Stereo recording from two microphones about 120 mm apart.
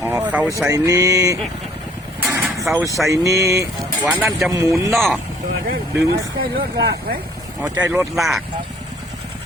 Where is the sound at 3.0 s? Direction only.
25° right (ahead or behind).